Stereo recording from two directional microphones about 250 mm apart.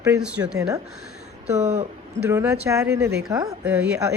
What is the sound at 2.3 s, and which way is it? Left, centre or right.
A woman's voice, centre.